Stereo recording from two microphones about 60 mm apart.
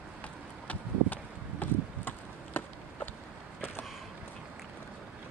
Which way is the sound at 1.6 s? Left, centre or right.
Left.